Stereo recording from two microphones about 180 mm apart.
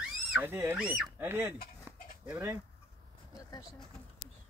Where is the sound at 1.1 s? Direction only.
10° right (ahead or behind).